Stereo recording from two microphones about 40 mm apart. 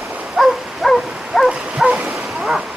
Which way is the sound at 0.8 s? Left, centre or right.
Centre.